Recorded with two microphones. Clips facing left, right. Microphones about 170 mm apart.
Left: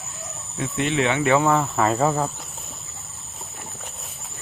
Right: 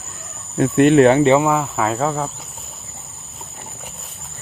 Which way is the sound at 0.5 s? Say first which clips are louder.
Right 12 dB; 55° right (ahead or behind).